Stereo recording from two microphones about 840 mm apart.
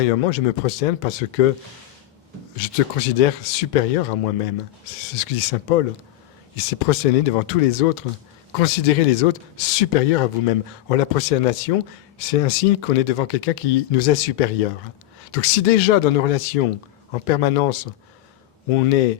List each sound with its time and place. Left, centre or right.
0.1 s speech: left
2.6 s speech: left